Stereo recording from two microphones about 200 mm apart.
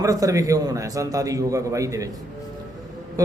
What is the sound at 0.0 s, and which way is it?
A man's voice, 15° right (ahead or behind).